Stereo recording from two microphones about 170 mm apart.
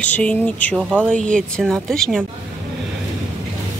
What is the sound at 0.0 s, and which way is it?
Speech, 5° left (ahead or behind).